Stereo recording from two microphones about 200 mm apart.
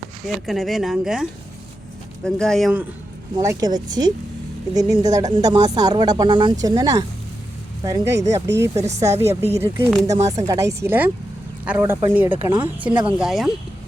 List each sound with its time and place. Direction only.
0.4 s speech: centre (ahead or behind)
3.3 s speech: 15° right (ahead or behind); by 13.5 s centre (ahead or behind)